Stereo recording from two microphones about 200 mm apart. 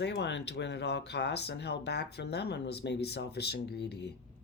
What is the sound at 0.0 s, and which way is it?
Speech, 60° left (ahead or behind).